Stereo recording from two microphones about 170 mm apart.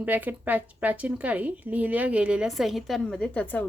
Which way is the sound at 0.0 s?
10° right (ahead or behind).